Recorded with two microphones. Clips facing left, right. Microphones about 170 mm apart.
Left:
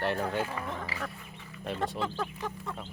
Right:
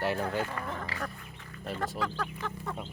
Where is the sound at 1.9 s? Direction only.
25° left (ahead or behind).